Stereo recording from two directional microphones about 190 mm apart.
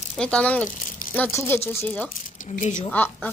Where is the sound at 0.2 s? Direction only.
5° left (ahead or behind).